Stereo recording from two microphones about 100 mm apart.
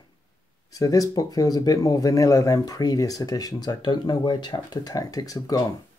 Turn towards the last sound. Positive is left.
turn(degrees=40)  # may be behind; listen again after turning